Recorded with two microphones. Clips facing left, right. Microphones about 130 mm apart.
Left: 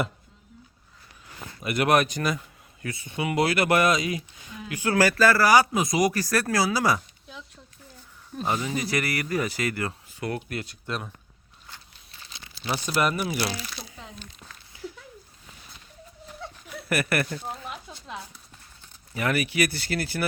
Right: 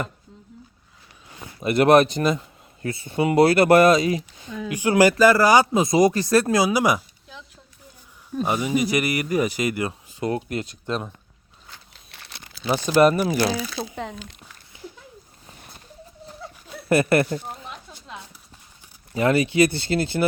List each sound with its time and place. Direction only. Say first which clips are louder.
1.6 s a man's voice: right 7 dB; 30° right (ahead or behind)
4.8 s speech: right 5 dB; 20° right (ahead or behind)
8.4 s speech: right 5 dB; 15° right (ahead or behind)
12.1 s crumpling: right 2 dB; 65° right (ahead or behind)
12.6 s speech: right 6 dB; 25° right (ahead or behind)
13.0 s a man's voice: right 9 dB; 35° right (ahead or behind)
14.7 s a sound: left 2 dB; 25° right (ahead or behind)
15.4 s a sound: right 4 dB; 45° right (ahead or behind)
16.9 s speech: right 8 dB; 25° right (ahead or behind)
17.4 s a sound: left 1 dB; 5° left (ahead or behind)
19.1 s speech: right 7 dB; 25° right (ahead or behind)